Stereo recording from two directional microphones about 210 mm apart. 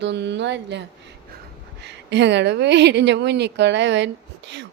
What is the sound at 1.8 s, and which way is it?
Speech, 55° right (ahead or behind).